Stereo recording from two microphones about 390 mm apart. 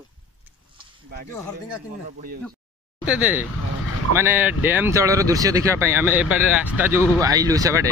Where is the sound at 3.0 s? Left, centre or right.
Centre.